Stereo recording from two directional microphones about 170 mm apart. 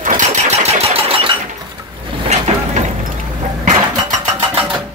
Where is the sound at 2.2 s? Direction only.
40° right (ahead or behind).